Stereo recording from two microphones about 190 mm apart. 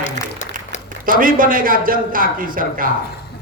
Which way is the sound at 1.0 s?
45° right (ahead or behind).